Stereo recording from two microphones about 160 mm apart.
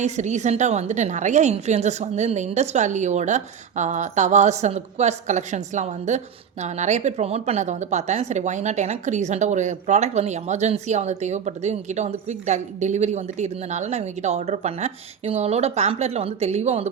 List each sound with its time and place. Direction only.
0.0 s a woman's voice: 45° right (ahead or behind)